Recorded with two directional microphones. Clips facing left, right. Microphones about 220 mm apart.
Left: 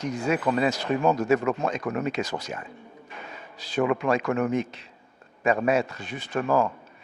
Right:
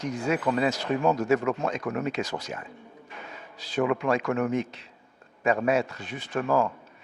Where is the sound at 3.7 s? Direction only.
20° left (ahead or behind).